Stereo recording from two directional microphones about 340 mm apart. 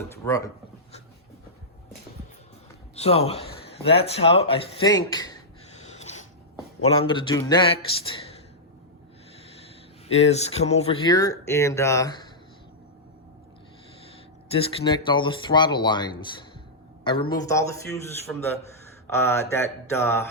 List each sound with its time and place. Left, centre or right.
0.3 s speech: centre
2.9 s speech: centre
5.8 s snort: centre
6.8 s speech: centre
10.1 s speech: centre
14.5 s speech: centre